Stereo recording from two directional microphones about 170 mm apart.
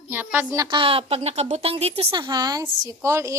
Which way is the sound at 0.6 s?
30° right (ahead or behind).